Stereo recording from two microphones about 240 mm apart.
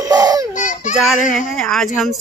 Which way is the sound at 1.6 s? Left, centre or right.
Centre.